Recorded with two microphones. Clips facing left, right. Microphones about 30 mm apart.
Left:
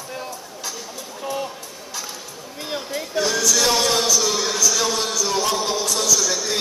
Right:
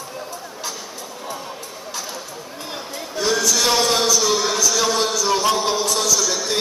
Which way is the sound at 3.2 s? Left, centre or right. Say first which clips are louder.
Right 2 dB; centre.